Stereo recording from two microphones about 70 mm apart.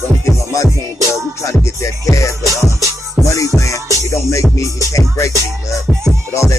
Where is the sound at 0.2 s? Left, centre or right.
Left.